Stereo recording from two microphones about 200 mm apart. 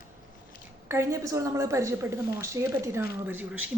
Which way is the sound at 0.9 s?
15° right (ahead or behind).